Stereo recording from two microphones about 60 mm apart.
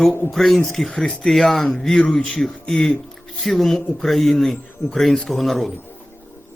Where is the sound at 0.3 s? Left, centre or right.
Centre.